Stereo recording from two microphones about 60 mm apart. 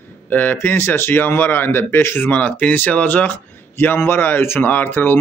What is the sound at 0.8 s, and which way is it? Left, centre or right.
A man's voice, left.